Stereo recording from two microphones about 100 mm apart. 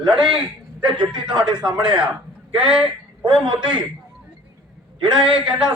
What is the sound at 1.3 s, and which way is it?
Speech, 50° right (ahead or behind).